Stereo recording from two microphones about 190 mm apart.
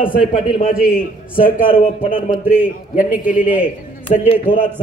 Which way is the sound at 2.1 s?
30° left (ahead or behind).